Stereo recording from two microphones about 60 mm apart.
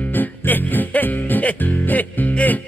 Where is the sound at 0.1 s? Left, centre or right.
Left.